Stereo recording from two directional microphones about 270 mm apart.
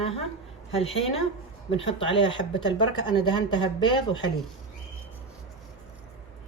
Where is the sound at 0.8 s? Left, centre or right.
Left.